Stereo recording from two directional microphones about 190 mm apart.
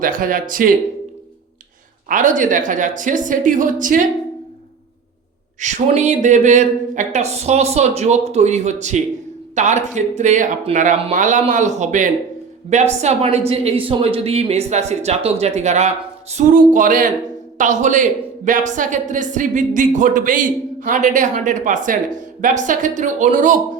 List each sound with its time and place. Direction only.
0.0 s a woman's voice: 45° right (ahead or behind)
2.0 s a woman's voice: 40° right (ahead or behind)
5.5 s a woman's voice: 40° right (ahead or behind)